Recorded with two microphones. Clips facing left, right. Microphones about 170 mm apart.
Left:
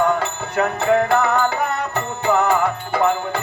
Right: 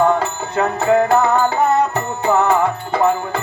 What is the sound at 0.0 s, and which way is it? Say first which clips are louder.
Music: right 3 dB; 30° right (ahead or behind).